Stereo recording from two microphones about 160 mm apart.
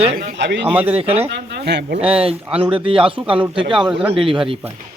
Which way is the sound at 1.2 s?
90° right.